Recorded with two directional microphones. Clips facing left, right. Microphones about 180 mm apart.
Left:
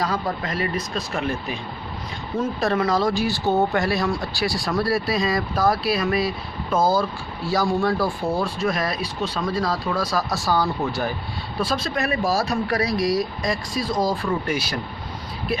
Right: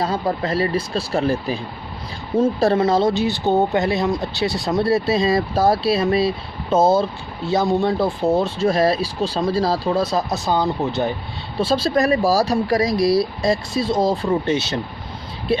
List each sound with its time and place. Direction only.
0.0 s speech: 30° right (ahead or behind)